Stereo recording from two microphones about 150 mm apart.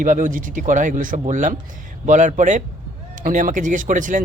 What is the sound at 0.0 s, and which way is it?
Speech, 60° right (ahead or behind).